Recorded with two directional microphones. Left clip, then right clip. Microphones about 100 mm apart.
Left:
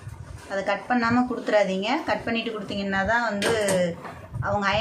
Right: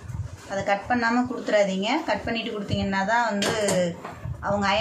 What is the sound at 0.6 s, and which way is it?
A woman's voice, 35° left (ahead or behind).